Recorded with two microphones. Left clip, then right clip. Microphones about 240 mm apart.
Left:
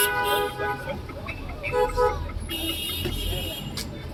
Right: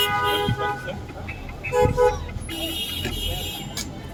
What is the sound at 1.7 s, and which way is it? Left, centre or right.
Vehicle, right.